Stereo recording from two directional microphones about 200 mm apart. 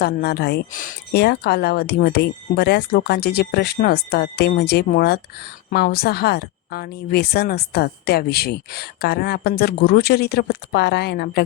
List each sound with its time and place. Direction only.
0.0 s speech: 55° left (ahead or behind)